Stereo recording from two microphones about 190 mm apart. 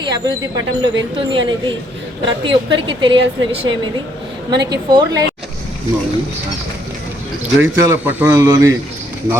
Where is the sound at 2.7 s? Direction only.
25° right (ahead or behind).